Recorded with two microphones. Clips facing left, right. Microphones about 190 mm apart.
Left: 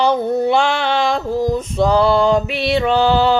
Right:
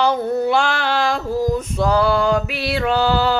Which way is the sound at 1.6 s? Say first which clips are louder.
Left 3 dB; 5° right (ahead or behind).